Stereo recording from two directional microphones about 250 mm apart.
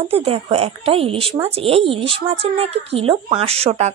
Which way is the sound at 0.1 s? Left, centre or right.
Right.